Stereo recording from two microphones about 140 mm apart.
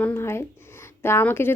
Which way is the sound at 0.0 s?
15° left (ahead or behind).